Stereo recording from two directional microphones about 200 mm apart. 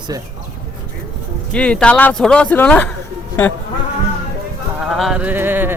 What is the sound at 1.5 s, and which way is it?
Speech, 5° left (ahead or behind).